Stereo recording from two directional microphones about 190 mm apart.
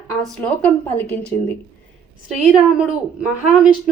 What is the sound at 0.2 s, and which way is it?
A woman's voice, 5° left (ahead or behind).